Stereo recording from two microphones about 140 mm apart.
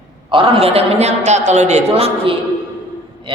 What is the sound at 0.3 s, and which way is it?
A man's voice, 40° right (ahead or behind).